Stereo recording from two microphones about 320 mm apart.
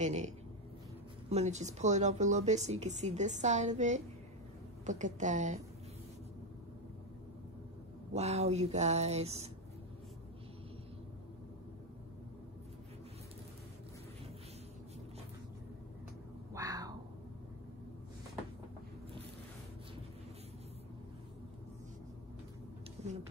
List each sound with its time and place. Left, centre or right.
0.0 s speech: right
1.3 s speech: right
8.1 s speech: centre
16.5 s a sound: centre